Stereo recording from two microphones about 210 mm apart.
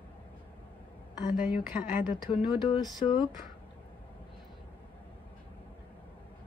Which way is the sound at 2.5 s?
20° left (ahead or behind).